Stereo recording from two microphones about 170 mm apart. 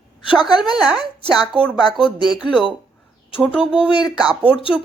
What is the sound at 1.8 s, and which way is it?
Speech, 25° left (ahead or behind).